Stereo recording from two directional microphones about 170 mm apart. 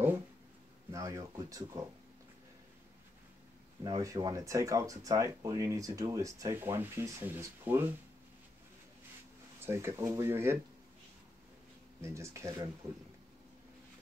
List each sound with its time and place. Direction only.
0.9 s speech: 20° right (ahead or behind)
3.8 s speech: 20° right (ahead or behind)
9.7 s speech: 15° right (ahead or behind)
12.0 s speech: 15° right (ahead or behind)